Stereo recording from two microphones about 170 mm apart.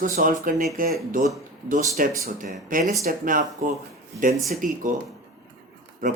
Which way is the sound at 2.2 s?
55° right (ahead or behind).